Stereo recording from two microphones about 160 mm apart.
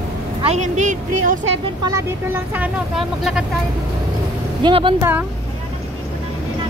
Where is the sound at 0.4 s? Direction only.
45° right (ahead or behind).